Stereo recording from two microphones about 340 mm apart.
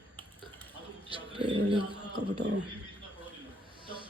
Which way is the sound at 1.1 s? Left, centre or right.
Centre.